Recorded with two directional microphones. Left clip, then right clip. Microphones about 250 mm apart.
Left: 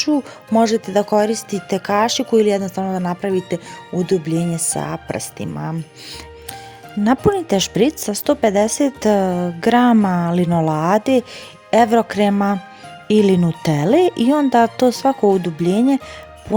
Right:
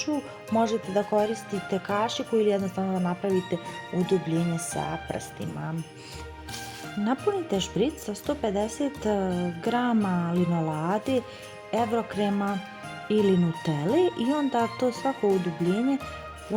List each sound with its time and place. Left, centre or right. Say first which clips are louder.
0.5 s speech: left 9 dB; left
7.0 s speech: left 11 dB; left